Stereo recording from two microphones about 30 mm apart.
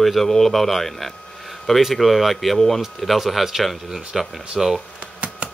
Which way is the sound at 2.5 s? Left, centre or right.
Centre.